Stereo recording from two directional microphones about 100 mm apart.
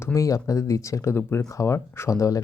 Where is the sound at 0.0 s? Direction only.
30° left (ahead or behind).